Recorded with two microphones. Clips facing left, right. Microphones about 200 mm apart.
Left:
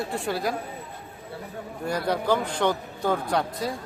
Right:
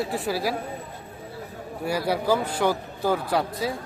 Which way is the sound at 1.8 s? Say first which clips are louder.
Right 1 dB; 5° right (ahead or behind).